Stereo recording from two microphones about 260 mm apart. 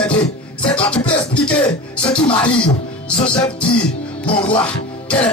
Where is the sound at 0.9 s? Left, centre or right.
Centre.